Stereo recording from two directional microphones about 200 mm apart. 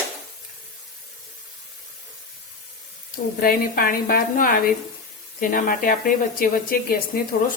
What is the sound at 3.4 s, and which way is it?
A woman's voice, 45° left (ahead or behind).